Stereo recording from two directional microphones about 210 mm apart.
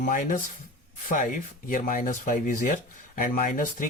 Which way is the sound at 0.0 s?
40° left (ahead or behind).